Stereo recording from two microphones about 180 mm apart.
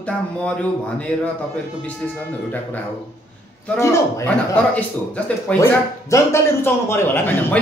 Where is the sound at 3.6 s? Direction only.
15° left (ahead or behind).